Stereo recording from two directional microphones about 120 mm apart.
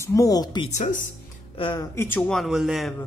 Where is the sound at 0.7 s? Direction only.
90° left.